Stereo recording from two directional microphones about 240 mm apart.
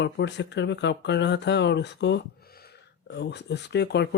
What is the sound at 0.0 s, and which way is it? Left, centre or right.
Speech, left.